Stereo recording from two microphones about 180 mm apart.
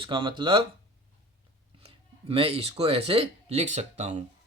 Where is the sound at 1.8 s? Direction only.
35° right (ahead or behind).